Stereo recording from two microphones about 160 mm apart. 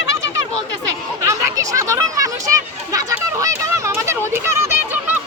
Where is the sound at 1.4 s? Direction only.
20° right (ahead or behind).